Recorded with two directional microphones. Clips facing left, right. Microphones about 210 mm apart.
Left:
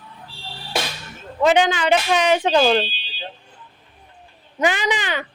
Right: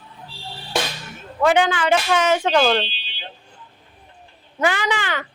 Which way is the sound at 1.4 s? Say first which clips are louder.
Left 1 dB; 20° left (ahead or behind).